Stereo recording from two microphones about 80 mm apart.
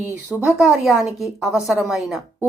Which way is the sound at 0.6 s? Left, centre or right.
Centre.